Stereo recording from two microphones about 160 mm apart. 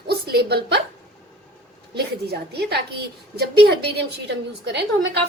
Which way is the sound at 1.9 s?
90° right.